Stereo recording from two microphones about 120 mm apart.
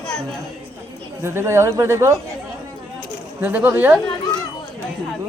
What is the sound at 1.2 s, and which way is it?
Speech, 20° right (ahead or behind).